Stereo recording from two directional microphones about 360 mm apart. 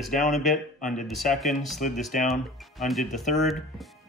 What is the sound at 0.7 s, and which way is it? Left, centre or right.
Speech, left.